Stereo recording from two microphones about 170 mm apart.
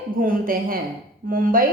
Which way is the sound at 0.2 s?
55° right (ahead or behind).